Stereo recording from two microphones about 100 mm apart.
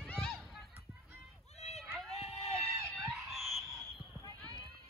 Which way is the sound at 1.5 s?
90° left.